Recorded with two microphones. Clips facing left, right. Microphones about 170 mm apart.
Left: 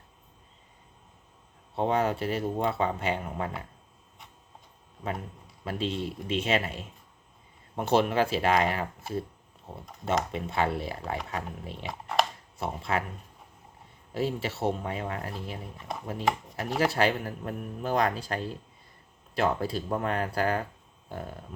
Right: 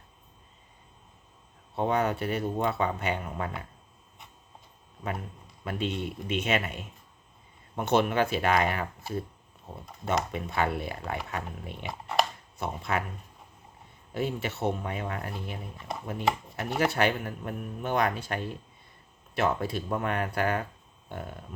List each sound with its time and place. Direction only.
1.7 s speech: 30° left (ahead or behind)
5.6 s speech: 30° left (ahead or behind)
10.1 s speech: 30° left (ahead or behind)
11.9 s speech: 5° right (ahead or behind)
12.5 s speech: 30° left (ahead or behind)
14.1 s speech: 30° left (ahead or behind)